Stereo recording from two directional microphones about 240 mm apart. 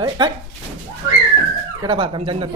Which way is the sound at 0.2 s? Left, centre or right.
Centre.